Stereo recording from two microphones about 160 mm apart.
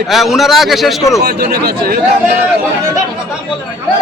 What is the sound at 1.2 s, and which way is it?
Speech, 75° right (ahead or behind).